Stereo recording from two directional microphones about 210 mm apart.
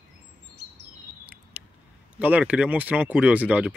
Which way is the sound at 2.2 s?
5° right (ahead or behind).